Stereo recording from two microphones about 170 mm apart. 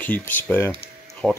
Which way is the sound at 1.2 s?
5° right (ahead or behind).